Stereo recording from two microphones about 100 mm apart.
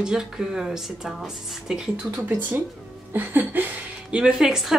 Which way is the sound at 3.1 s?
20° right (ahead or behind).